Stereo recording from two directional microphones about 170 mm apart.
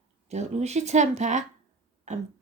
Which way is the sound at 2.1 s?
45° right (ahead or behind).